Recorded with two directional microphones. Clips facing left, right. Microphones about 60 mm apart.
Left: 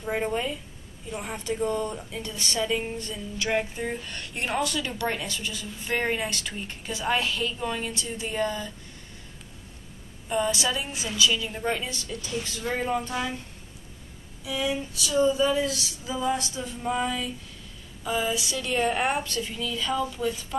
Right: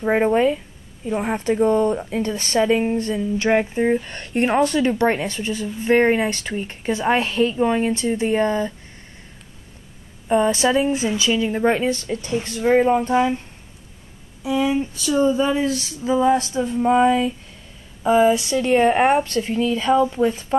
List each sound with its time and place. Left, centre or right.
0.0 s speech: right
10.2 s speech: right
14.4 s speech: right